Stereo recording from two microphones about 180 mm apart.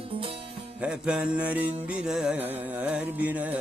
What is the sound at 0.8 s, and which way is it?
Music, 5° right (ahead or behind).